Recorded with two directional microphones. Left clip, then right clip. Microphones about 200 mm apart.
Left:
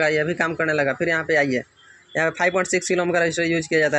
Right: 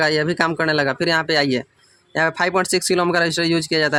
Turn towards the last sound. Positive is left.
turn(degrees=-35)  # may be behind; listen again after turning